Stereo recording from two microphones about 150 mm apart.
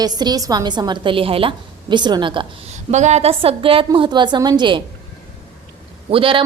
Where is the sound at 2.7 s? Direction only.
50° right (ahead or behind); by 4.8 s 30° right (ahead or behind).